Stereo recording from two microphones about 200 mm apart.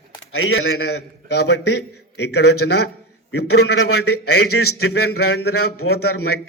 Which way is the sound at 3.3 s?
90° left.